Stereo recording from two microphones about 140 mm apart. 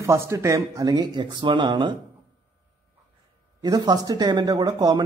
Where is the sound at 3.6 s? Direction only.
30° right (ahead or behind).